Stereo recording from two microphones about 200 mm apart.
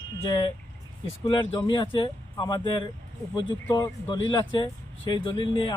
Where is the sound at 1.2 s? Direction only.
25° left (ahead or behind).